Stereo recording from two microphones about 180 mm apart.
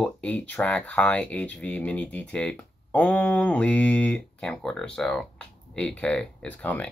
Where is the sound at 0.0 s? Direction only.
5° left (ahead or behind).